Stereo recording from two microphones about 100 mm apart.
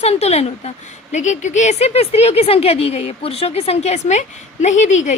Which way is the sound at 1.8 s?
90° left.